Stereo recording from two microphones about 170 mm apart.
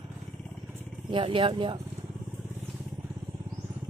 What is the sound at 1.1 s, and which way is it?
Speech, 30° right (ahead or behind).